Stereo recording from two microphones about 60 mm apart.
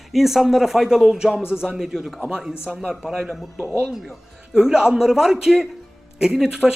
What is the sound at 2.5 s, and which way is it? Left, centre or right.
Speech, centre.